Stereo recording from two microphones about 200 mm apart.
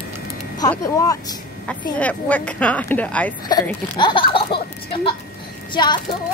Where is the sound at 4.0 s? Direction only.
25° left (ahead or behind).